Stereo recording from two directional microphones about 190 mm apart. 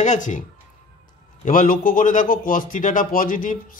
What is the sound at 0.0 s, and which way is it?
Speech, 40° left (ahead or behind).